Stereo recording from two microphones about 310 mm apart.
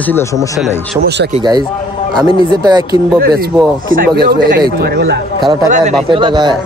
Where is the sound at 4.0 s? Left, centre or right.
Right.